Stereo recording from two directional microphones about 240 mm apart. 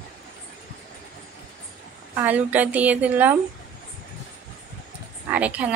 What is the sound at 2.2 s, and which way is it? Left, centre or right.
A woman's voice, centre.